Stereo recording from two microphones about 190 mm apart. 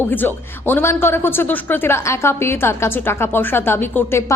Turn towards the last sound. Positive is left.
turn(degrees=10)  # may be behind; listen again after turning